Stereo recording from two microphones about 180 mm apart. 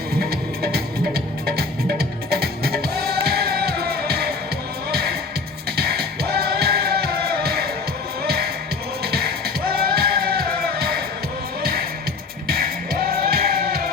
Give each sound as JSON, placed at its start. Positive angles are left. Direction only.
{"t": 0.2, "sound": "music", "side_deg": -60}